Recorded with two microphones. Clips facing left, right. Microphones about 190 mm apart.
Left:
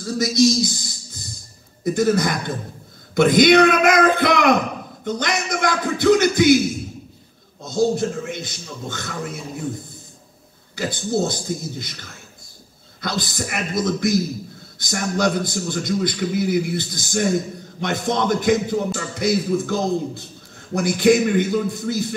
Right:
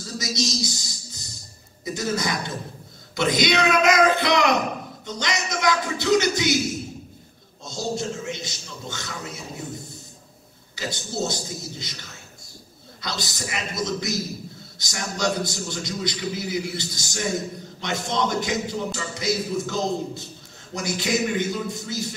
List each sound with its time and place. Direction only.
0.0 s a sound: 50° left (ahead or behind)
1.9 s a man's voice: 50° left (ahead or behind)
7.6 s a man's voice: 55° left (ahead or behind)
10.8 s a man's voice: 50° left (ahead or behind)